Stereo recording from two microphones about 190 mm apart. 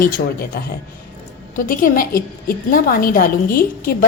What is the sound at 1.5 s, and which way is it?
A woman's voice, 45° left (ahead or behind).